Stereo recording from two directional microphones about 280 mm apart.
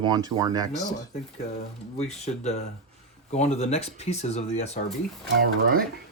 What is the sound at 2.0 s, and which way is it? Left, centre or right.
Speech, left.